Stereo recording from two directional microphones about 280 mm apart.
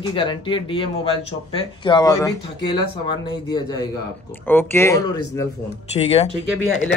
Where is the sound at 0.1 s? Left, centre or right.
Centre.